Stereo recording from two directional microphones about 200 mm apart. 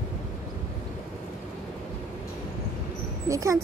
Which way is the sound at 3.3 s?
15° right (ahead or behind).